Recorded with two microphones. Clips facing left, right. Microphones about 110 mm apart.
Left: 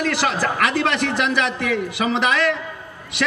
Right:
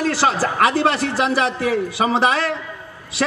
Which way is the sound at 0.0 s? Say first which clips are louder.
Right 2 dB; 35° right (ahead or behind).